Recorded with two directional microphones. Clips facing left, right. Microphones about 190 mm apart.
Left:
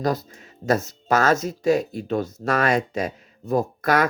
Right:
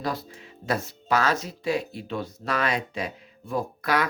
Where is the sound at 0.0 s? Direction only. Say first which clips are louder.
Left 6 dB; 45° left (ahead or behind).